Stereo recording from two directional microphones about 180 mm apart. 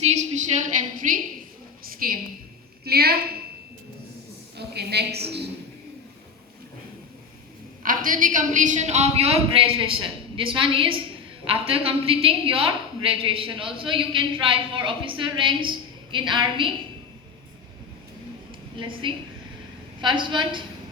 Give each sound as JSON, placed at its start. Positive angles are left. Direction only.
{"t": 0.0, "sound": "a woman's voice", "side_deg": -40}
{"t": 1.8, "sound": "a woman's voice", "side_deg": -55}
{"t": 4.5, "sound": "a woman's voice", "side_deg": -65}
{"t": 7.9, "sound": "a woman's voice", "side_deg": -50}
{"t": 18.8, "sound": "a woman's voice", "side_deg": -25}